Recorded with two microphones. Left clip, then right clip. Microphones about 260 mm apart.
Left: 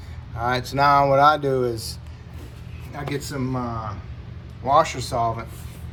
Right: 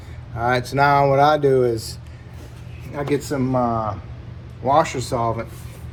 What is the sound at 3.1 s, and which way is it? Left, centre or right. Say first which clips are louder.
Speech: right 8 dB; centre.